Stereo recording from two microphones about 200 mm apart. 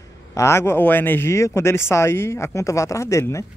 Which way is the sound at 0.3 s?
15° left (ahead or behind).